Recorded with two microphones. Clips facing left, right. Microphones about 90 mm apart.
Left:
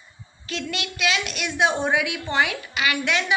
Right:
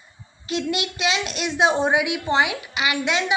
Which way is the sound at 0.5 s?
20° right (ahead or behind).